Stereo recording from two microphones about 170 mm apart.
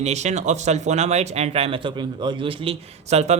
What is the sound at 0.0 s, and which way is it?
Speech, 40° right (ahead or behind).